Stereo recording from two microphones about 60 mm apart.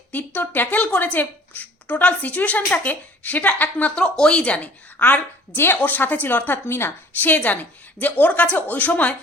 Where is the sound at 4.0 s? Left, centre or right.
Centre; by 7.3 s left.